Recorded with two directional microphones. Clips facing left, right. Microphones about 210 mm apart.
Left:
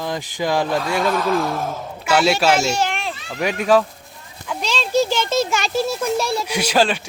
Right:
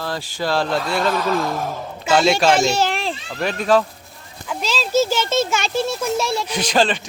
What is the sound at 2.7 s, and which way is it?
Children playing, 35° right (ahead or behind).